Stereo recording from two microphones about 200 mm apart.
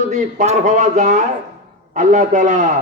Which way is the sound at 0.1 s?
40° right (ahead or behind).